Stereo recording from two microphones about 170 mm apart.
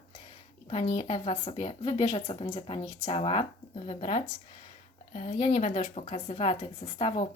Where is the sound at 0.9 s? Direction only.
35° left (ahead or behind).